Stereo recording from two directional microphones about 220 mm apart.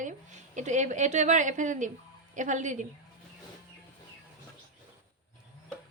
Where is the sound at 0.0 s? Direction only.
35° right (ahead or behind).